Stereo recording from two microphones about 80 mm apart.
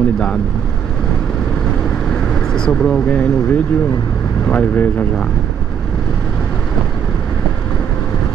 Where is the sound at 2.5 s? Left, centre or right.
Centre.